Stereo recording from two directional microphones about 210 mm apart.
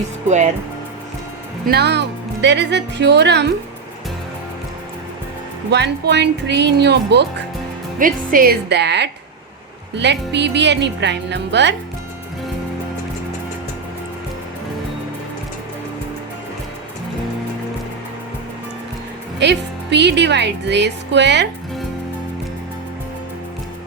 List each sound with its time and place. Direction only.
0.3 s speech: 35° right (ahead or behind)
1.6 s speech: 50° right (ahead or behind)
5.7 s speech: 55° right (ahead or behind)
7.9 s speech: 40° right (ahead or behind)
19.4 s speech: 55° right (ahead or behind)